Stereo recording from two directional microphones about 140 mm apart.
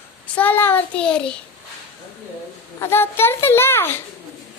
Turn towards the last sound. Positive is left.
turn(degrees=15)  # may be behind; listen again after turning